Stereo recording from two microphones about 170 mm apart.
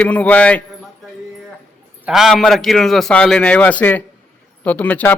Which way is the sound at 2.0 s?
Centre (ahead or behind).